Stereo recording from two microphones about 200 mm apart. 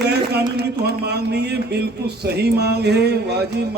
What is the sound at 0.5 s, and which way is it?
Speech, 55° right (ahead or behind).